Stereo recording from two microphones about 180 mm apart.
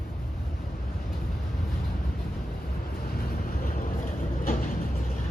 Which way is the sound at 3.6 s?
50° left (ahead or behind).